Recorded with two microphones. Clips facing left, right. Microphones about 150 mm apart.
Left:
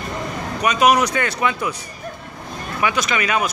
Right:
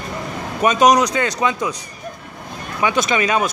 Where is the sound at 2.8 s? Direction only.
25° right (ahead or behind).